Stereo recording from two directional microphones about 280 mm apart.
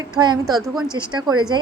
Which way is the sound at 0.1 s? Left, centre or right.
Centre.